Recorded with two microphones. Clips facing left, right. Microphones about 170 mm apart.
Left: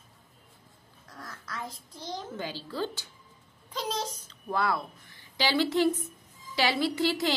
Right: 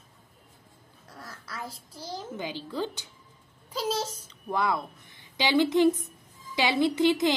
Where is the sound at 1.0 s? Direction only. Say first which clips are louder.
Left 1 dB; 10° right (ahead or behind).